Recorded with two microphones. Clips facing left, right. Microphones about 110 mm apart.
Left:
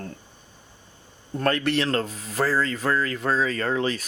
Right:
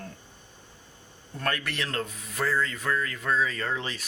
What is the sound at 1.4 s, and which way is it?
Speech, 30° left (ahead or behind).